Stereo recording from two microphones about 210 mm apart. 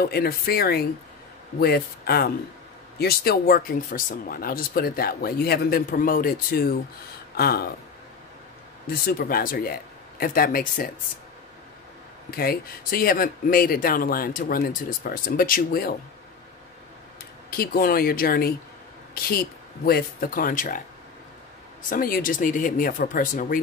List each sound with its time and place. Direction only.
0.0 s speech: 45° left (ahead or behind)
8.8 s speech: 45° left (ahead or behind)
12.3 s speech: 45° left (ahead or behind)
17.5 s speech: 45° left (ahead or behind)
21.8 s speech: 40° left (ahead or behind)